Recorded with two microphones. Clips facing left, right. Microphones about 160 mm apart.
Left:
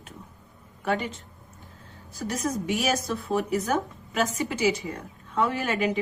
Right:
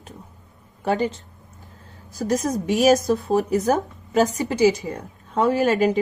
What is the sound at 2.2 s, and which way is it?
A woman's voice, 40° right (ahead or behind).